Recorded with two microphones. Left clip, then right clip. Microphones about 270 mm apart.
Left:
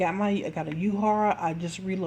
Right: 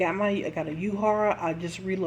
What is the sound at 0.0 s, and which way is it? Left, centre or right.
A woman's voice, left.